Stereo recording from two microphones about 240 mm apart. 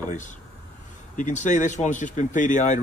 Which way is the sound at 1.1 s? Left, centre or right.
Left.